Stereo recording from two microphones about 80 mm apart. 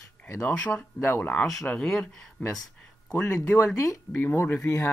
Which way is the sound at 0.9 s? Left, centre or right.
Left.